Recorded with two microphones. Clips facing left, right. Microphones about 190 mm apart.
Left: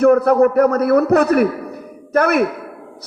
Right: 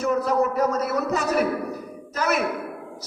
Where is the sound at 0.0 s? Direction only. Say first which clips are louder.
Left 10 dB; 60° left (ahead or behind).